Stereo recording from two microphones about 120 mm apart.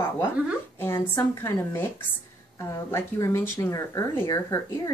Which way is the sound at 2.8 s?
25° left (ahead or behind).